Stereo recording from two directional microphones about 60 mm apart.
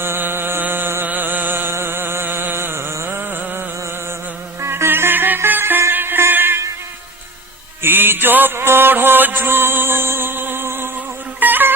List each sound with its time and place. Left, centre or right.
0.0 s a sound: right
0.6 s music: right
1.0 s a sound: right
4.6 s music: right
7.8 s mantra: right
11.3 s insect: right